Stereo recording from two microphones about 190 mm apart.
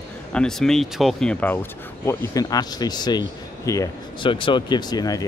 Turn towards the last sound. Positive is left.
turn(degrees=20)  # may be behind; listen again after turning